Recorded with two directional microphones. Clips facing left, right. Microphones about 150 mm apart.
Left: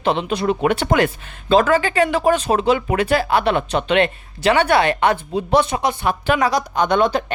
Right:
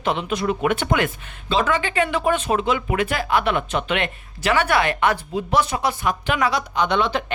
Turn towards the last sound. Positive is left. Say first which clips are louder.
# left 4 dB
turn(degrees=45)  # may be behind; listen again after turning